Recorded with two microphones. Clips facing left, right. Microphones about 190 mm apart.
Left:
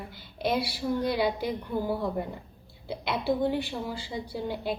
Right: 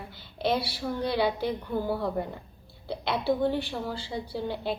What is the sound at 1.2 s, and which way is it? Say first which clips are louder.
A woman's voice: right 1 dB; centre (ahead or behind).